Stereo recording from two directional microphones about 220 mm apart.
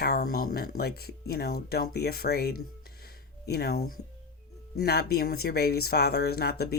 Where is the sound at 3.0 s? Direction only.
45° left (ahead or behind).